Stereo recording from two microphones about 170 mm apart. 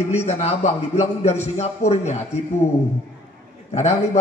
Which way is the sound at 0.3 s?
40° left (ahead or behind).